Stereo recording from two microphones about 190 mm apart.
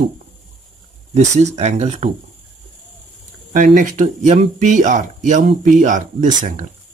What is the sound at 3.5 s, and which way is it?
Speech, 45° right (ahead or behind).